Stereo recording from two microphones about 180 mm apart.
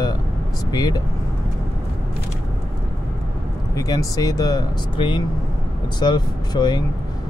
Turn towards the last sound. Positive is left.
turn(degrees=25)  # may be behind; listen again after turning